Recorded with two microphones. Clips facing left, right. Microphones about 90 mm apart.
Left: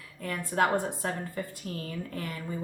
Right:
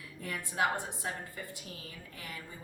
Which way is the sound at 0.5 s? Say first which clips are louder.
Left 6 dB; 50° left (ahead or behind).